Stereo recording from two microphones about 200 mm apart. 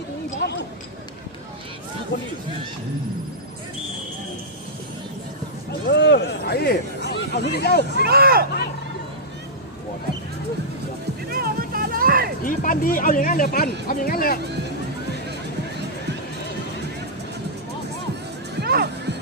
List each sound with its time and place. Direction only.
0.4 s speech: 55° left (ahead or behind)
5.9 s a sound: 60° left (ahead or behind)
7.1 s speech: 55° left (ahead or behind)
8.0 s speech: 50° right (ahead or behind)
11.3 s music: 50° right (ahead or behind)
12.4 s speech: 45° left (ahead or behind)
18.6 s music: 55° right (ahead or behind)